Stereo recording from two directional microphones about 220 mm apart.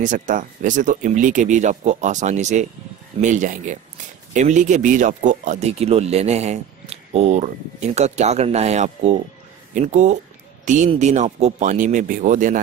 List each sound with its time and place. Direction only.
0.0 s speech: 35° right (ahead or behind)